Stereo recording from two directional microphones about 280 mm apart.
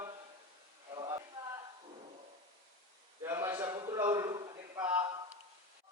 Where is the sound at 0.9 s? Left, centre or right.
Centre.